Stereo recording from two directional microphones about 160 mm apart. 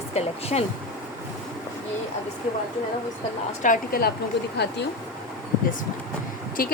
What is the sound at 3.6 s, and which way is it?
Speech, 70° left (ahead or behind).